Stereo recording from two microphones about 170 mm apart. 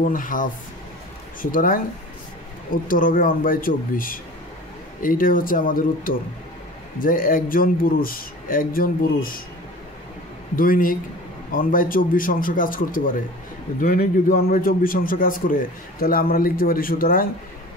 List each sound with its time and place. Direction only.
0.0 s a man's voice: 50° left (ahead or behind)
10.5 s a man's voice: 55° left (ahead or behind)